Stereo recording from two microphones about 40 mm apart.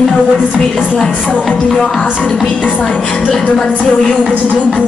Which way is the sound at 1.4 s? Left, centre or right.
Centre.